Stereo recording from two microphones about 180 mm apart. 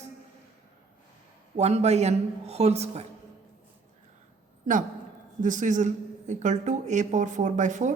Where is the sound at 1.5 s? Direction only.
35° right (ahead or behind).